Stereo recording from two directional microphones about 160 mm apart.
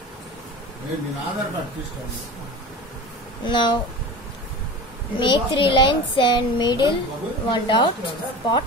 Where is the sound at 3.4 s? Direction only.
30° left (ahead or behind).